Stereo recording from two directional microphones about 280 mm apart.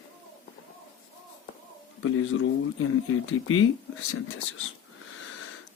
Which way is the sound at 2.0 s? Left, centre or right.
Left.